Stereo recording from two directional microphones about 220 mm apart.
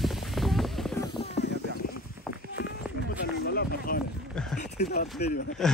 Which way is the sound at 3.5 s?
40° left (ahead or behind).